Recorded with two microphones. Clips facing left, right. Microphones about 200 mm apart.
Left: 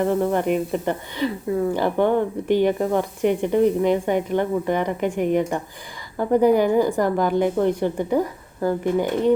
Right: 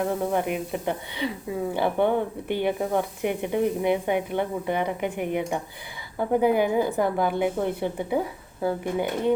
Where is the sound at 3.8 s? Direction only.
10° right (ahead or behind).